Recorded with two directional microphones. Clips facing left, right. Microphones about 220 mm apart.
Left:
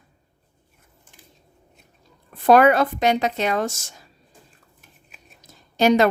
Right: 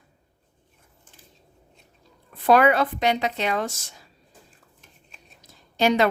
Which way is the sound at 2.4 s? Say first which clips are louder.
Left 3 dB; 45° left (ahead or behind).